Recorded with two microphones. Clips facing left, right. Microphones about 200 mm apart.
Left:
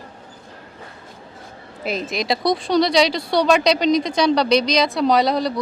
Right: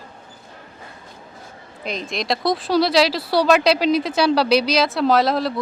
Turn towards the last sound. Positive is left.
turn(degrees=0)  # may be behind; listen again after turning